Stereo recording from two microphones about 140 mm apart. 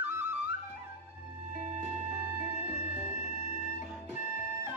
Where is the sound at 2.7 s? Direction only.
15° right (ahead or behind).